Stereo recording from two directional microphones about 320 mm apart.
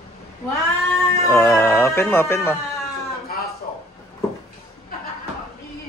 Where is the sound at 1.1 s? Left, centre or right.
Centre.